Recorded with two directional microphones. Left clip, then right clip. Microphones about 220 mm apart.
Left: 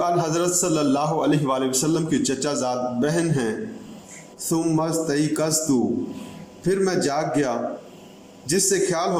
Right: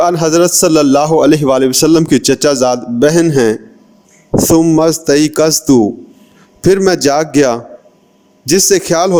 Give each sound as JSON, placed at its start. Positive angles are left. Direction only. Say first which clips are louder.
{"t": 0.0, "sound": "a man's voice", "louder": "right 12 dB", "side_deg": -50}
{"t": 4.5, "sound": "a man's voice", "louder": "right 12 dB", "side_deg": -40}